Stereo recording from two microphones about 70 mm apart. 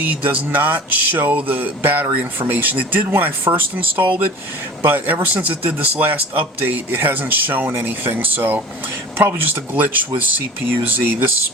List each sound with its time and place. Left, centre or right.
0.0 s speech: right
9.7 s speech: right